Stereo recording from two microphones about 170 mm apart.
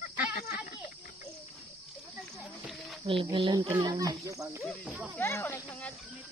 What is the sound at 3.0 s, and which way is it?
Speech, 30° right (ahead or behind).